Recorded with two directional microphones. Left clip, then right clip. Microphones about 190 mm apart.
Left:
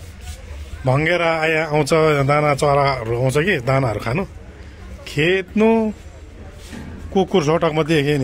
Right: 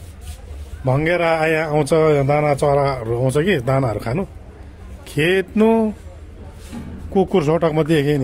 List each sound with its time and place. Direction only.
0.8 s speech: 5° right (ahead or behind); by 5.9 s 30° right (ahead or behind)
7.2 s speech: 20° right (ahead or behind)